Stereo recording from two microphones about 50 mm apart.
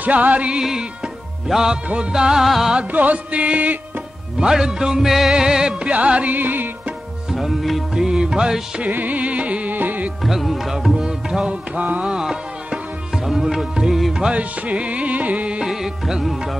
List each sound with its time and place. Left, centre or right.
0.0 s music: right
0.6 s music: centre
2.4 s music: centre
2.7 s music: right
4.4 s music: centre; by 6.3 s right
6.3 s music: right
7.2 s music: centre
8.8 s music: right
10.2 s music: centre
11.4 s music: right
12.0 s music: centre
14.3 s music: right
15.6 s music: centre